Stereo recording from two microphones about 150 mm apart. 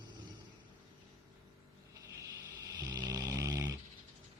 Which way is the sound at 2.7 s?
25° right (ahead or behind).